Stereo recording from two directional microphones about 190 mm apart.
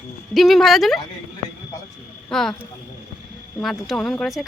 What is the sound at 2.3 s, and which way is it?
Speech, centre (ahead or behind).